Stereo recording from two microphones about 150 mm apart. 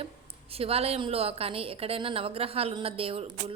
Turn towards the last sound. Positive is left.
turn(degrees=-40)  # may be behind; listen again after turning